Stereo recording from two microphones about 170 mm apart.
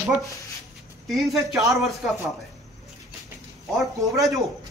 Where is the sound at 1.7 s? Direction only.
Centre (ahead or behind).